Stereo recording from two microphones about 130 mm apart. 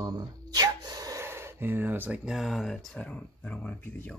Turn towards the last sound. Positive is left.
turn(degrees=10)  # may be behind; listen again after turning